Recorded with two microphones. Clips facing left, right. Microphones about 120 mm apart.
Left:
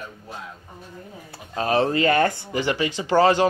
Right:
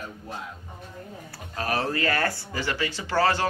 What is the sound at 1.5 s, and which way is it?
Speech, 25° left (ahead or behind).